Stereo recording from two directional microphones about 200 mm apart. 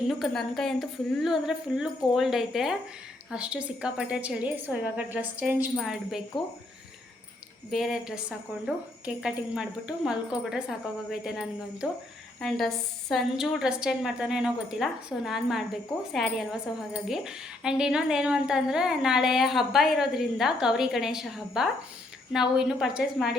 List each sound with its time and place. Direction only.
0.1 s a woman's voice: centre (ahead or behind)
7.7 s a woman's voice: centre (ahead or behind)